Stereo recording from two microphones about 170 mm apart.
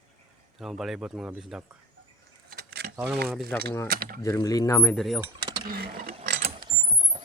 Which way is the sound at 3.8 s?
60° right (ahead or behind).